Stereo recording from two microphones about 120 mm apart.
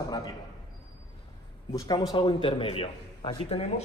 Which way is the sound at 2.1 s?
40° left (ahead or behind).